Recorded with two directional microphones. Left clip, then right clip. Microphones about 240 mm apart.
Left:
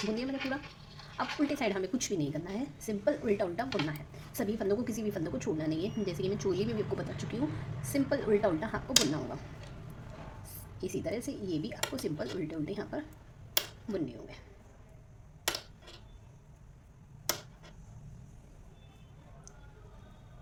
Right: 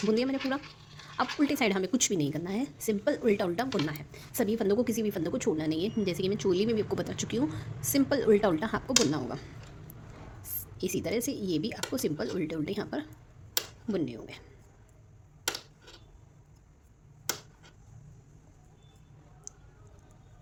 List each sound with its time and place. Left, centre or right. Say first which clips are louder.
0.1 s a woman's voice: right 6 dB; right
10.5 s a woman's voice: right 5 dB; right
19.5 s a sound: right 9 dB; right